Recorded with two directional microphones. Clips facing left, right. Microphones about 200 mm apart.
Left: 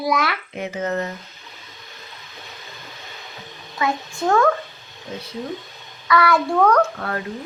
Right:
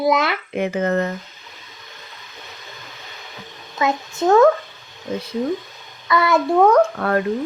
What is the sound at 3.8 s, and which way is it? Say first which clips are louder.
Speech: right 3 dB; 20° right (ahead or behind).